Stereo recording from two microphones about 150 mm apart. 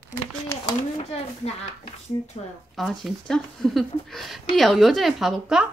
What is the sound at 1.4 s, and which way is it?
Speech, 45° left (ahead or behind).